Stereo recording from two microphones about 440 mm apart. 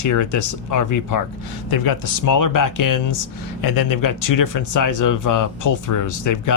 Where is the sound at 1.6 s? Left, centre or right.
Left.